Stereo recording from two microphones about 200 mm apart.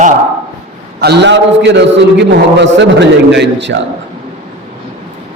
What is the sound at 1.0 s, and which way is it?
A man's voice, 55° right (ahead or behind).